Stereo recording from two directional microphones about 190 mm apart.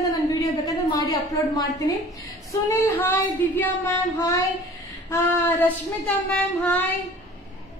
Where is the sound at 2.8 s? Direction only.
10° left (ahead or behind).